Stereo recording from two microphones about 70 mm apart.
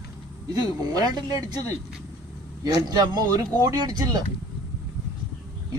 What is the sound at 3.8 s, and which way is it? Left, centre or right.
Speech, right.